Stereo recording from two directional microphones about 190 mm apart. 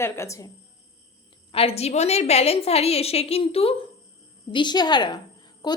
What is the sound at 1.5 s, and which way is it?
A woman's voice, 30° left (ahead or behind).